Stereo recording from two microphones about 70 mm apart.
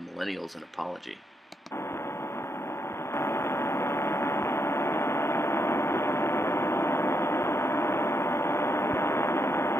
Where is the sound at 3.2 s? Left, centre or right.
Left.